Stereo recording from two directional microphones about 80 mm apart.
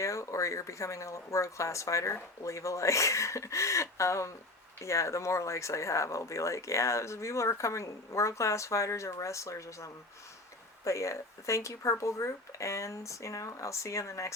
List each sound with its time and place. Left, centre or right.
0.0 s speech: left